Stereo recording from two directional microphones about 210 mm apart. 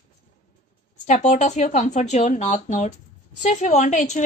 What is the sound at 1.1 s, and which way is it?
Speech, 35° left (ahead or behind).